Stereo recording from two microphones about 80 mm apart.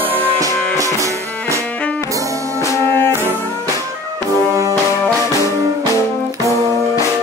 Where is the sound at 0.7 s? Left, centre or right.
Right.